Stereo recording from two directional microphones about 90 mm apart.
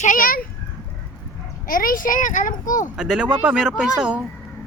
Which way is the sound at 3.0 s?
Centre (ahead or behind).